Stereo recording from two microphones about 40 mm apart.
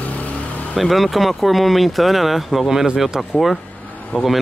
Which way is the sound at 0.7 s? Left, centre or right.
Centre.